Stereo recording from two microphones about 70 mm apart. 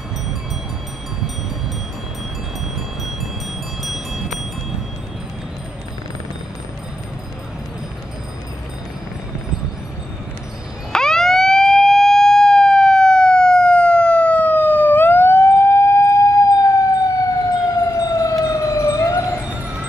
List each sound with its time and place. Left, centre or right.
3.8 s wind chime: centre
10.9 s emergency vehicle: centre; by 19.4 s left